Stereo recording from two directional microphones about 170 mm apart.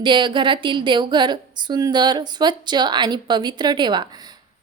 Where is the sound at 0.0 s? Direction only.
30° right (ahead or behind).